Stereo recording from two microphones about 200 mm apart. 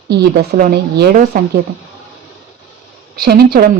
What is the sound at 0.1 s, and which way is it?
Speech, 50° right (ahead or behind).